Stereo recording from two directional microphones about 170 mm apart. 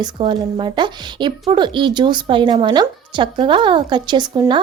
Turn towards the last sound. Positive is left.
turn(degrees=-25)  # may be behind; listen again after turning